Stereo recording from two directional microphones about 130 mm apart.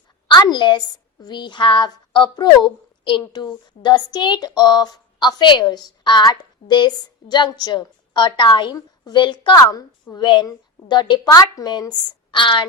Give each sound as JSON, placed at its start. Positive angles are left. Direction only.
{"t": 0.3, "sound": "a woman's voice", "side_deg": 30}